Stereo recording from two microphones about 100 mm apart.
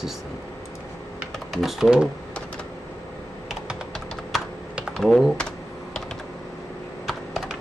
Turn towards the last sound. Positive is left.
turn(degrees=0)  # may be behind; listen again after turning